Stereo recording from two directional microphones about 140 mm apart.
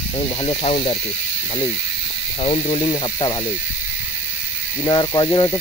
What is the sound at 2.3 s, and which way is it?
Speech, 45° left (ahead or behind).